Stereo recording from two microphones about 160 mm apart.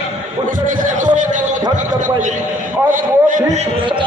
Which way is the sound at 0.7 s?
50° right (ahead or behind).